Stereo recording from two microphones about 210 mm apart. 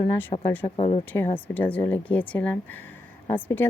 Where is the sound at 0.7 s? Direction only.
30° left (ahead or behind).